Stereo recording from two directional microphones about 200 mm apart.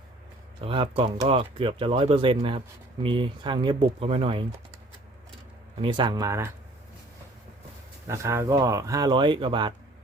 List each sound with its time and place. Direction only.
0.6 s speech: 25° right (ahead or behind)
5.8 s speech: 25° right (ahead or behind)
8.0 s speech: 15° right (ahead or behind)